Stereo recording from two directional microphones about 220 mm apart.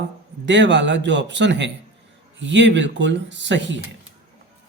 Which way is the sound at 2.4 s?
55° right (ahead or behind).